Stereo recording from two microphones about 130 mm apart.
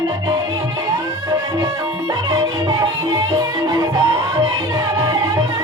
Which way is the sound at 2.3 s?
25° right (ahead or behind).